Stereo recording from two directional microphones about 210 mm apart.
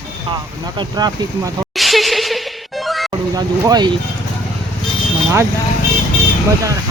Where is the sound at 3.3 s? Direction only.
20° right (ahead or behind).